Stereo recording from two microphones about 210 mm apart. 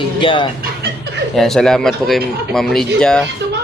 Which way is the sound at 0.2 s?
25° left (ahead or behind).